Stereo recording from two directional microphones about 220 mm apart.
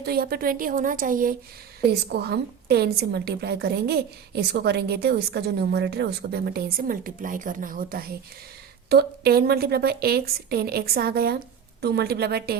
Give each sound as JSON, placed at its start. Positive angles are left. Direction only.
{"t": 0.0, "sound": "a woman's voice", "side_deg": -45}